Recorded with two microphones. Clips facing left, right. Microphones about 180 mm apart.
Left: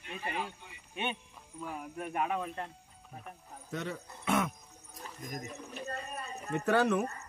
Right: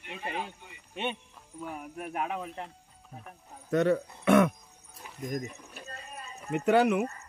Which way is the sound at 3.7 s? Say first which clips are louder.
Right 13 dB; 65° right (ahead or behind).